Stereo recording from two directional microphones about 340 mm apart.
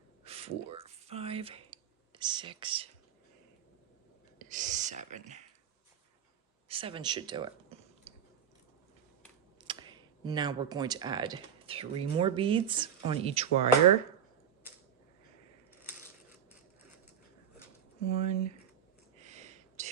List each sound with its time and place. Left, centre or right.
0.3 s a sound: centre
4.4 s speech: right
6.7 s speech: centre
9.6 s speech: centre
18.0 s speech: centre
19.2 s a sound: centre